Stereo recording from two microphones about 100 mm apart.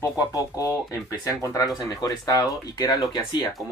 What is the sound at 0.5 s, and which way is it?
Speech, 35° left (ahead or behind).